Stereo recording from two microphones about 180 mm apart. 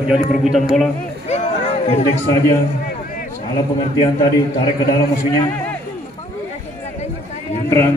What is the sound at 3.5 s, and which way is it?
Speech, 25° left (ahead or behind).